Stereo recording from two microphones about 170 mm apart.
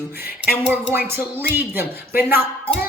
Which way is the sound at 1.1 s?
10° right (ahead or behind).